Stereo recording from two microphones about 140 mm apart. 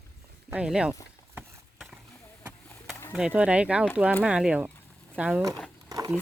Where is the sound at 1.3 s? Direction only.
5° right (ahead or behind).